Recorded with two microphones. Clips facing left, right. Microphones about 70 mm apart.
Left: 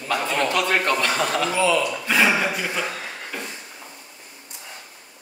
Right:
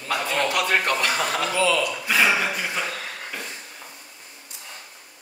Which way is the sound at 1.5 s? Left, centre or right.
Left.